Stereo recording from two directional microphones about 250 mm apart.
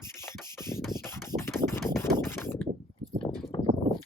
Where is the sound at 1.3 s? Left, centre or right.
Centre.